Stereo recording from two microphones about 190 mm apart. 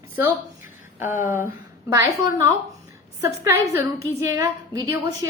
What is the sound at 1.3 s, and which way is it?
A woman's voice, 15° right (ahead or behind).